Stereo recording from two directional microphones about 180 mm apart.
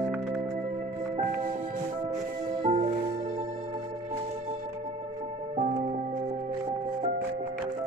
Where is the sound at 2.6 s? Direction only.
35° right (ahead or behind).